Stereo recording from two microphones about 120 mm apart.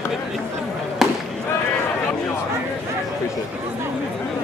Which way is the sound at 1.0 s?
Centre (ahead or behind).